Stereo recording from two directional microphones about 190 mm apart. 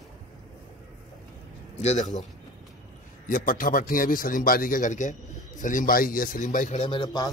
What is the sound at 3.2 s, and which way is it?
A man's voice, 45° left (ahead or behind).